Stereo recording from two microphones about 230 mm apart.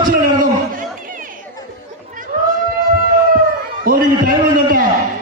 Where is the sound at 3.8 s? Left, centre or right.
Right.